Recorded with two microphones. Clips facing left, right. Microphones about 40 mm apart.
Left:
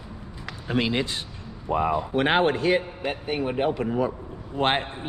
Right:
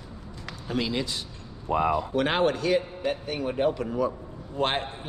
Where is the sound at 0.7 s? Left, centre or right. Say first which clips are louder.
Left 4 dB; left.